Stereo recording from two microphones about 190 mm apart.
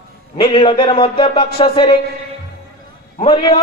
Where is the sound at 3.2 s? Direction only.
30° left (ahead or behind).